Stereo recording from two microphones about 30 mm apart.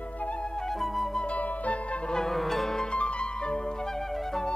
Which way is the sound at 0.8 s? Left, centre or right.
Centre.